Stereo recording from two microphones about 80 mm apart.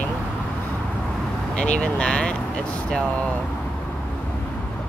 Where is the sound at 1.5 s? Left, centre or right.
Centre.